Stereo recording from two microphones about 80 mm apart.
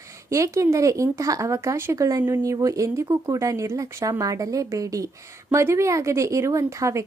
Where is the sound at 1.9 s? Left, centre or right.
Right.